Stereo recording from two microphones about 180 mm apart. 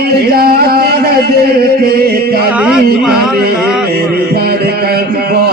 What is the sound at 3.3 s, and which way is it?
Speech, 60° right (ahead or behind).